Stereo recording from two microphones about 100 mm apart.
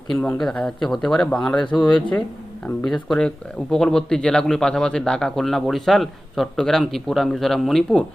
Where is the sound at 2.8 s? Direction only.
5° left (ahead or behind).